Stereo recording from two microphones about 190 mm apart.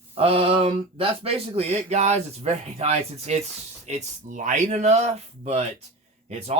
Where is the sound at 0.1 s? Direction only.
30° right (ahead or behind).